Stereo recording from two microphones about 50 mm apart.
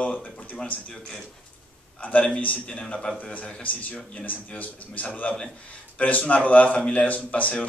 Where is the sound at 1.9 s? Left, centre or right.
Left.